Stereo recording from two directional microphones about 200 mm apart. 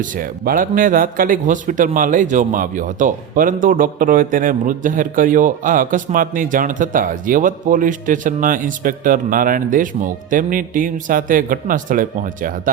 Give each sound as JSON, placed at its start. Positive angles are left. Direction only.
{"t": 0.0, "sound": "a man's voice", "side_deg": -45}